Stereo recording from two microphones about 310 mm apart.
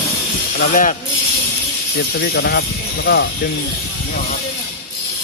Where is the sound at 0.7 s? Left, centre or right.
Left.